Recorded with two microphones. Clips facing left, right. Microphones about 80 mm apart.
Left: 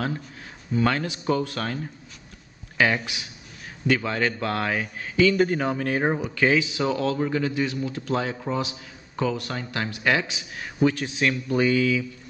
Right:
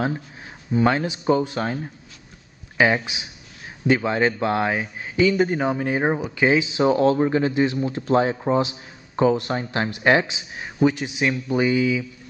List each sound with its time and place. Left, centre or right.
0.7 s speech: right